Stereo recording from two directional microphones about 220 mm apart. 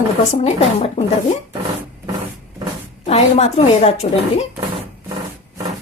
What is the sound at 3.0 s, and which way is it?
Speech, 30° left (ahead or behind).